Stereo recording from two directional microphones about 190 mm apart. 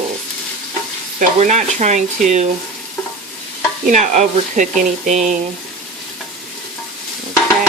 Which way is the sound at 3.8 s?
40° right (ahead or behind).